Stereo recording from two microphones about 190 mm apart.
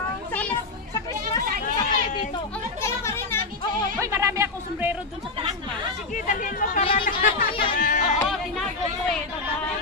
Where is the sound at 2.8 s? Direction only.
15° left (ahead or behind).